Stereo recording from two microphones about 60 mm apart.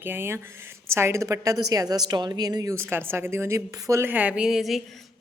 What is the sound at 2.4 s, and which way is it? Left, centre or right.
Speech, right.